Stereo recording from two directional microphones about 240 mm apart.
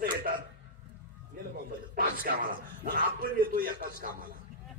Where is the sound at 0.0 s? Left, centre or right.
Right.